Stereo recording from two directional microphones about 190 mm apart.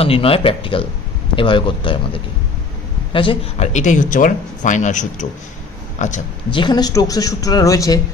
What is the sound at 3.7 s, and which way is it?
Speech, 40° left (ahead or behind).